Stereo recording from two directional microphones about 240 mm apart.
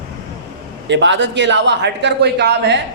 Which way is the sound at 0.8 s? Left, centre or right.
Right.